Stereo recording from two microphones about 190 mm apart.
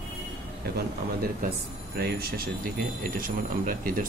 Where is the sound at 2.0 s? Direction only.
55° right (ahead or behind).